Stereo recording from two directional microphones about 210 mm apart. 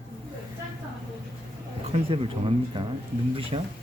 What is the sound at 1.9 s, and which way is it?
Speech, 25° right (ahead or behind).